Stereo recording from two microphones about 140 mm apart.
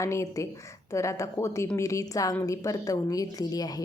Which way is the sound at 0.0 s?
20° left (ahead or behind).